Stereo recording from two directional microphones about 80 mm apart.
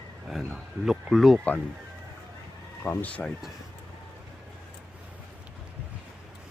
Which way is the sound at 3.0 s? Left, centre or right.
Centre.